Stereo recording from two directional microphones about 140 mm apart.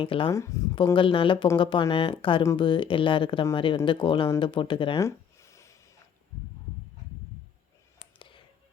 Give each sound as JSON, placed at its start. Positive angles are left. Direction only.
{"t": 0.0, "sound": "speech", "side_deg": 40}
{"t": 0.3, "sound": "speech", "side_deg": 20}
{"t": 0.9, "sound": "speech", "side_deg": 40}
{"t": 4.9, "sound": "a sound", "side_deg": 20}